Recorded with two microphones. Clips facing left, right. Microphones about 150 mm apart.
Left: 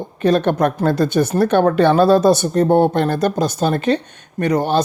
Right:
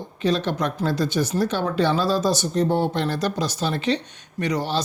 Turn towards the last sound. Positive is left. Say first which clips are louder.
# left 7 dB
turn(degrees=50)  # may be behind; listen again after turning